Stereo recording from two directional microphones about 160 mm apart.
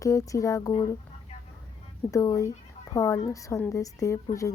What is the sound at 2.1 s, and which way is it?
A woman's voice, 20° left (ahead or behind).